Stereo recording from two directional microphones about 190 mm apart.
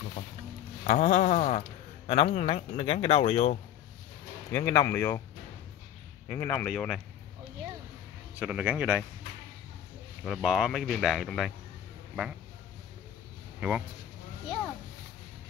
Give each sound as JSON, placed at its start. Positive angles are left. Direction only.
{"t": 0.8, "sound": "speech", "side_deg": 40}
{"t": 4.5, "sound": "speech", "side_deg": 20}
{"t": 6.2, "sound": "speech", "side_deg": 10}
{"t": 8.4, "sound": "speech", "side_deg": -5}
{"t": 10.2, "sound": "speech", "side_deg": 0}
{"t": 13.6, "sound": "speech", "side_deg": -5}